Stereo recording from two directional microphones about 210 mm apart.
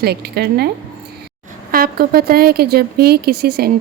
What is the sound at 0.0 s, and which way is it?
Speech, 50° right (ahead or behind).